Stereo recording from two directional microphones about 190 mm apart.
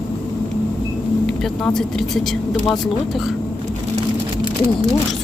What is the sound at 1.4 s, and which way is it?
Speech, centre (ahead or behind).